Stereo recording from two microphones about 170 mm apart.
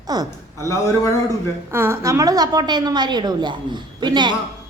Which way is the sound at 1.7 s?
15° right (ahead or behind).